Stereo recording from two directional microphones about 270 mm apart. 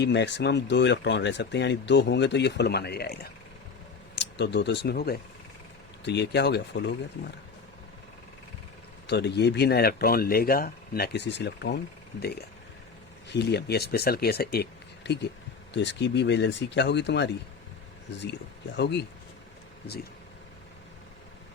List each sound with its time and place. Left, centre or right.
0.0 s speech: left
9.0 s speech: left
13.3 s speech: left
18.8 s speech: left